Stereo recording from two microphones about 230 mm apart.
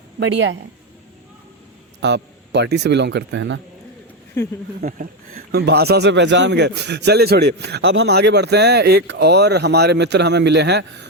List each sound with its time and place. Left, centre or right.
2.0 s speech: right
4.8 s speech: right